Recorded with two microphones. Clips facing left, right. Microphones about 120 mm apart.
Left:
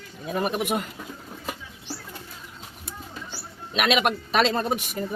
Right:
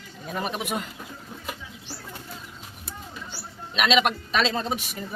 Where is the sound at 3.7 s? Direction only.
50° left (ahead or behind).